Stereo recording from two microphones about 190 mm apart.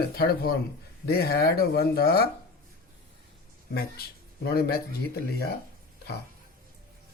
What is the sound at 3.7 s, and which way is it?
Speech, 55° left (ahead or behind).